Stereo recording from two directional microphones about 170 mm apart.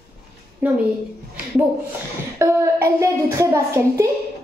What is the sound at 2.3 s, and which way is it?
A woman's voice, 15° right (ahead or behind).